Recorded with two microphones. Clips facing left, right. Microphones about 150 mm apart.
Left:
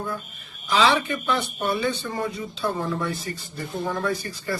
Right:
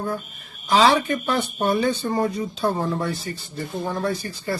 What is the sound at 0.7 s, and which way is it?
Speech, 40° right (ahead or behind).